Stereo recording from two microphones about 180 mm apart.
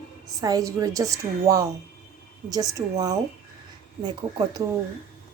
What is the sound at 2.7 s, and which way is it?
A woman's voice, 20° right (ahead or behind).